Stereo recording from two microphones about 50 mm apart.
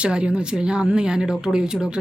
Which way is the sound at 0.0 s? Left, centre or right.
Right.